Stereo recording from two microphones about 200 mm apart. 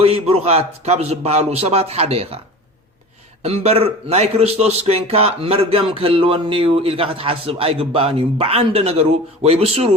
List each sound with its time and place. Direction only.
0.0 s a man's voice: 30° right (ahead or behind)
3.4 s speech: 30° right (ahead or behind)